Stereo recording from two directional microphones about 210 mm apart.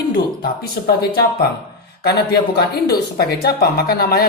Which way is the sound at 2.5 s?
50° left (ahead or behind).